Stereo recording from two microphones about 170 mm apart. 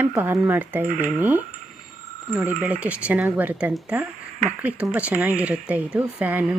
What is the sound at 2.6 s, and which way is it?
Speech, 5° right (ahead or behind).